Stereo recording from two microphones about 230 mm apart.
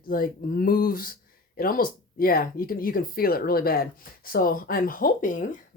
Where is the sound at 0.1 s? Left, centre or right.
Left.